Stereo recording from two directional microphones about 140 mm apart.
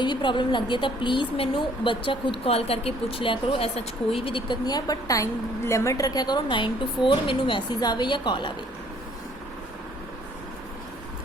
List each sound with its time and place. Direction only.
0.0 s speech: 35° left (ahead or behind)